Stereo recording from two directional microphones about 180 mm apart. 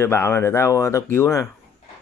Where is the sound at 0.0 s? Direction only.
15° left (ahead or behind).